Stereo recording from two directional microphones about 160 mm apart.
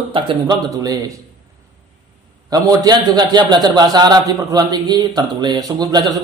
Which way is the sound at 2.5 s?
25° right (ahead or behind).